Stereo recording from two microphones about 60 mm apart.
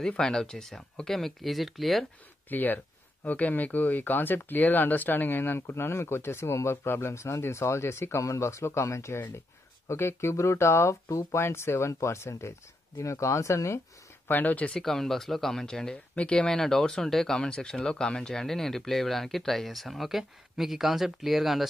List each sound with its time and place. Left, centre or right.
0.2 s speech: centre
2.5 s speech: left
14.2 s speech: left
14.7 s speech: centre